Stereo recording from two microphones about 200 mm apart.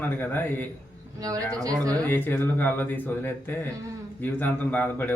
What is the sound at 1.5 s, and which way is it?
Speech, 15° right (ahead or behind).